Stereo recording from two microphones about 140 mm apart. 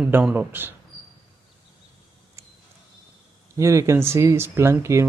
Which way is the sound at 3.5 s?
20° right (ahead or behind).